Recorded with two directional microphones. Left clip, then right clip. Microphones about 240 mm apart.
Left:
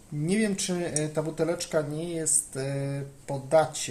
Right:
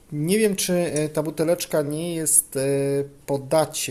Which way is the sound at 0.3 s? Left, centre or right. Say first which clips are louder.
Right 7 dB; right.